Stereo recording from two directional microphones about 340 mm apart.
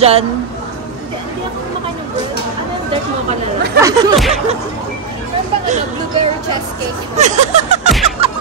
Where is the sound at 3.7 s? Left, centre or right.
Centre.